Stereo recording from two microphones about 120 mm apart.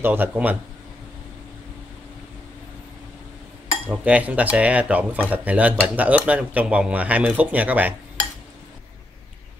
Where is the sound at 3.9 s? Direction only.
10° right (ahead or behind).